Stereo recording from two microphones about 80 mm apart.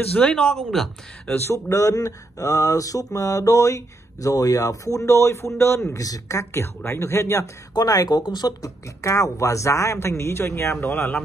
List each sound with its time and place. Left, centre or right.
0.1 s speech: centre
1.3 s mantra: left
6.9 s speech: left
7.7 s speech: left